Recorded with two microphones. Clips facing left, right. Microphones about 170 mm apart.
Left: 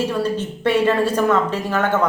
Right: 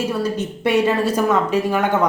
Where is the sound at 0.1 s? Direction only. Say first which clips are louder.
Even; 10° right (ahead or behind).